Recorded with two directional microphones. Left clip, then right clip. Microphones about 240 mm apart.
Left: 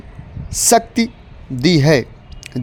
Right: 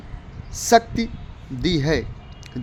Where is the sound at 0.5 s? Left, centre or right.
Left.